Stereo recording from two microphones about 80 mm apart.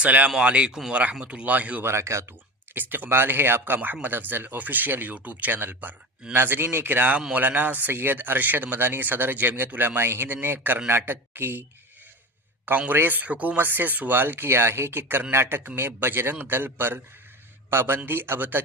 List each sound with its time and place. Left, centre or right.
0.0 s speech: centre
1.8 s speech: right
2.7 s speech: right
12.6 s speech: right